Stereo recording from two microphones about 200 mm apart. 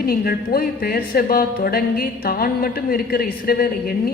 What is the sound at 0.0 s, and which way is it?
Speech, 50° left (ahead or behind).